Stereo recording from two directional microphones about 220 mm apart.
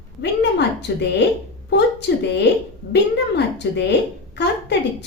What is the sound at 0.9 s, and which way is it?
Speech, 50° left (ahead or behind).